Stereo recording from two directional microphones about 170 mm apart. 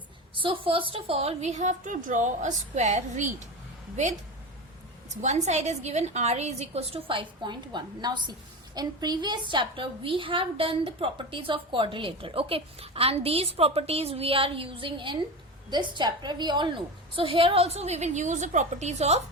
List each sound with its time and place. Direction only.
0.3 s a woman's voice: 30° right (ahead or behind)